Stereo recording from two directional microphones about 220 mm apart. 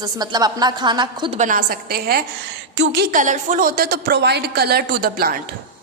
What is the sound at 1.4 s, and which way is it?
Speech, 35° right (ahead or behind).